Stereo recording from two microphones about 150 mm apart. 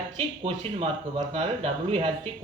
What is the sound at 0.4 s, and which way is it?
Speech, 40° right (ahead or behind).